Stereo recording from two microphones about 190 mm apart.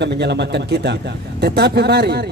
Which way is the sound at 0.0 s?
65° right (ahead or behind).